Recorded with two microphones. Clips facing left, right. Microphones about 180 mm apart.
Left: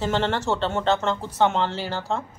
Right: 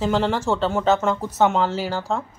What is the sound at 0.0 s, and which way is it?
Speech, centre (ahead or behind).